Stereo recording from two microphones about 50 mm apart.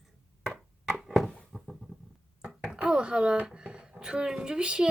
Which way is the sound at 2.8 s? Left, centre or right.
Centre.